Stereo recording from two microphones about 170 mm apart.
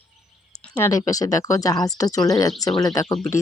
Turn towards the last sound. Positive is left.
turn(degrees=20)  # may be behind; listen again after turning